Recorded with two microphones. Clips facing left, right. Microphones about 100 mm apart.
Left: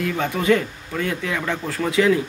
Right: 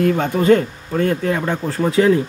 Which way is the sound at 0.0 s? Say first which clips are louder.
Right 6 dB; 40° right (ahead or behind).